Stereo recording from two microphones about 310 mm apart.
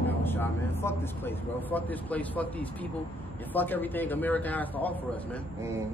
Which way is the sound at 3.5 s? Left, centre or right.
Centre.